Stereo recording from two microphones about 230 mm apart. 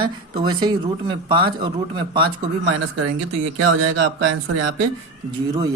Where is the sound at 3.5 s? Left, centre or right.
Right.